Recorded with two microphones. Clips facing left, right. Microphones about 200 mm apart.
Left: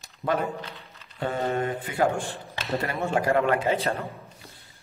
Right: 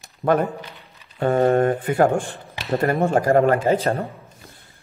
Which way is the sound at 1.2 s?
55° right (ahead or behind).